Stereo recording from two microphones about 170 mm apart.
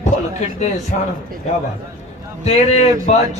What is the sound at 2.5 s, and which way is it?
Speech, 45° left (ahead or behind).